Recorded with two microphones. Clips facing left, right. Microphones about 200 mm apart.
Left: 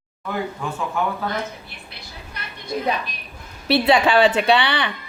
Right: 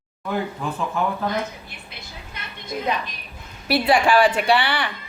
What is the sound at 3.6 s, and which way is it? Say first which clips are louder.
A child's voice: left 2 dB; 25° left (ahead or behind).